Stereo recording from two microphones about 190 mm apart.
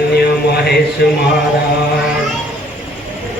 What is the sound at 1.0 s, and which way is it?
Music, 60° left (ahead or behind).